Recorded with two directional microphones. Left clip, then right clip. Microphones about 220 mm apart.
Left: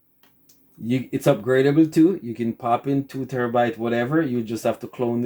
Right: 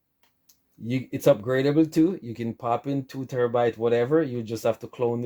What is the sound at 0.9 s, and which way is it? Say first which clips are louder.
Speech: left 1 dB; 45° right (ahead or behind).